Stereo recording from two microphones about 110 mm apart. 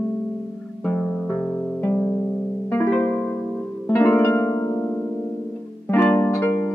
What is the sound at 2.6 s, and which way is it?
Harp, 15° left (ahead or behind).